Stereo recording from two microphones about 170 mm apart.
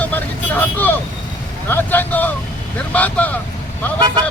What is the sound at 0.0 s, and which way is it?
Vehicle, 10° left (ahead or behind).